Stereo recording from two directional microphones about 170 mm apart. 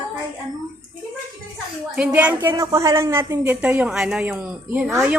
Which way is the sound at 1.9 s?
10° right (ahead or behind).